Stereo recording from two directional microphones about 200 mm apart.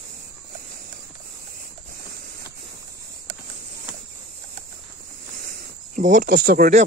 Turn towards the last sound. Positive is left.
turn(degrees=-45)  # may be behind; listen again after turning